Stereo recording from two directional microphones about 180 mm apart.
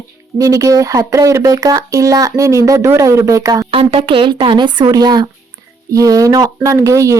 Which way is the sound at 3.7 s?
30° right (ahead or behind).